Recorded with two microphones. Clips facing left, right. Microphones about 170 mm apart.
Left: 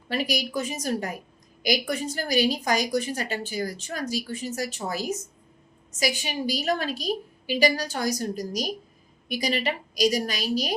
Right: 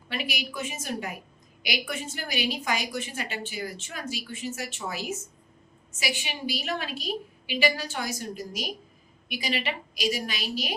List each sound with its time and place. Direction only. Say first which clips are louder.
0.1 s a woman's voice: left 7 dB; 40° left (ahead or behind)